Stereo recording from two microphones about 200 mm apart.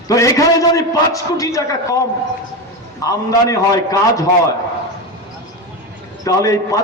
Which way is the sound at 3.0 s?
15° left (ahead or behind).